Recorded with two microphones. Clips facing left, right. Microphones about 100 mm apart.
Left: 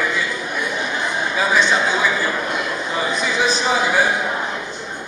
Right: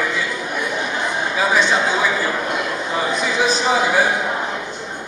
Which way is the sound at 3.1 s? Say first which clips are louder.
Right 1 dB; 45° right (ahead or behind).